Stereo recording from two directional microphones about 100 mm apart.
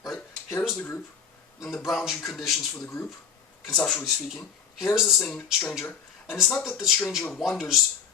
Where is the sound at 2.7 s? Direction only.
25° left (ahead or behind).